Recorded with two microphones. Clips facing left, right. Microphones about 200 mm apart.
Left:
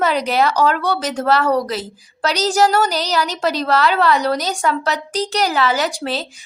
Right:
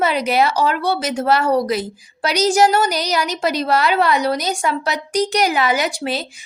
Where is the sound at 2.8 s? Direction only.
35° left (ahead or behind).